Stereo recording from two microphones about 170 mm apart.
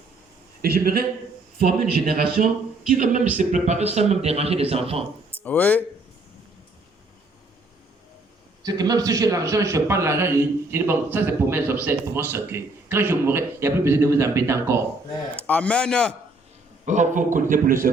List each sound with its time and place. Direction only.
0.6 s a man's voice: 65° right (ahead or behind)
2.9 s a man's voice: 50° right (ahead or behind); by 5.0 s 35° right (ahead or behind)
5.4 s speech: 10° left (ahead or behind)
8.6 s a man's voice: 20° right (ahead or behind)
15.4 s a man's voice: 5° left (ahead or behind)
16.8 s a man's voice: 45° right (ahead or behind)